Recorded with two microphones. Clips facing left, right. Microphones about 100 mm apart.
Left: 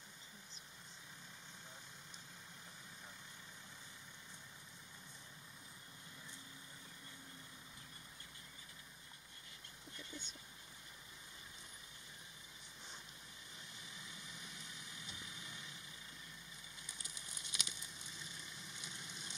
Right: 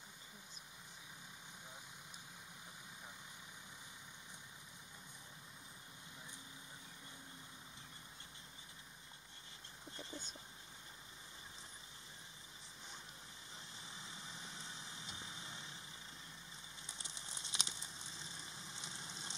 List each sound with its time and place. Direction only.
9.9 s a sound: 40° right (ahead or behind)
13.8 s vehicle: 30° right (ahead or behind)
16.8 s fire: 30° right (ahead or behind)